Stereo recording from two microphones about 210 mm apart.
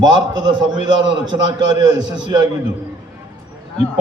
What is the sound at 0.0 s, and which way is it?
A man's voice, 20° right (ahead or behind).